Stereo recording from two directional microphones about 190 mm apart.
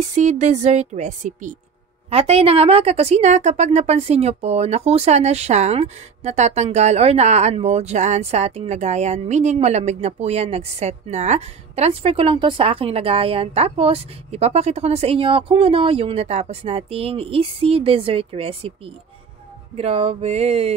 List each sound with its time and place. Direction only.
0.1 s a woman's voice: 40° right (ahead or behind)
19.7 s a woman's voice: 30° right (ahead or behind)